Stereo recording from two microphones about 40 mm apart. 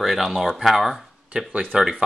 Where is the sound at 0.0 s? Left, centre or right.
Centre.